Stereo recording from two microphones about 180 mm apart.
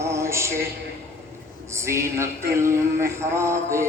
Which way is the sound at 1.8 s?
15° right (ahead or behind).